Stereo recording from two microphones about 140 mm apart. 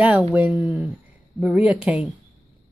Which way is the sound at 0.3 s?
10° right (ahead or behind).